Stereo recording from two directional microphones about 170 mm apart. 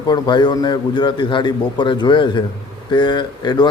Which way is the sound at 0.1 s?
25° left (ahead or behind).